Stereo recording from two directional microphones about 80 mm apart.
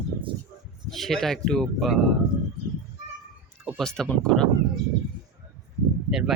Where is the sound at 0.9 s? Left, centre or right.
Centre.